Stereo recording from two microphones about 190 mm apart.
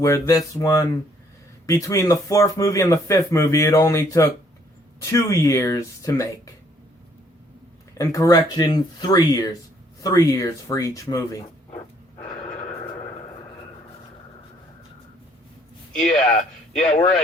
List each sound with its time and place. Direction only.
0.0 s speech: 15° left (ahead or behind)
7.9 s speech: 20° left (ahead or behind)
15.9 s speech: 5° left (ahead or behind)
16.1 s a man's voice: 35° left (ahead or behind)